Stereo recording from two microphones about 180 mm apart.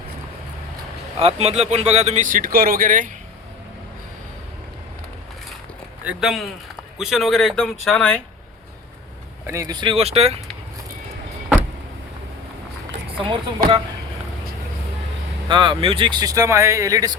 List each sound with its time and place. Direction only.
1.2 s speech: 35° right (ahead or behind)
6.1 s speech: 5° right (ahead or behind)
9.5 s speech: 20° right (ahead or behind); by 10.3 s 35° right (ahead or behind)
13.1 s speech: 30° right (ahead or behind)
15.4 s speech: 25° right (ahead or behind)